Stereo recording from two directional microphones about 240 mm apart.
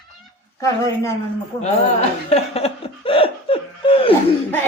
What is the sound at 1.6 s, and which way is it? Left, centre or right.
Chuckle, left.